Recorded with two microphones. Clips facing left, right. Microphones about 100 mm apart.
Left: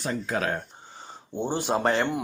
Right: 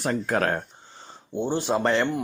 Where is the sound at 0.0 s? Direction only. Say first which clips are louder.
Right 4 dB; 55° right (ahead or behind).